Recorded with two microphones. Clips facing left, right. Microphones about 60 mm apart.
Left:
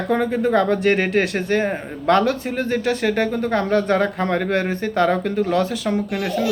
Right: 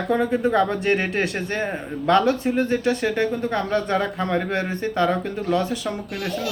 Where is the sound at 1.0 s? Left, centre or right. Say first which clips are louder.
Left 4 dB; left.